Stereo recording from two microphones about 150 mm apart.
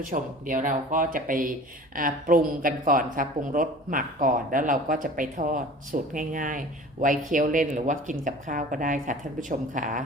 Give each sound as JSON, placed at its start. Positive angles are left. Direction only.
{"t": 0.0, "sound": "speech", "side_deg": -65}